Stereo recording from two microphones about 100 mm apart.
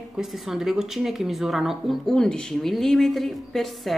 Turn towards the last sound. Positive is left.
turn(degrees=0)  # may be behind; listen again after turning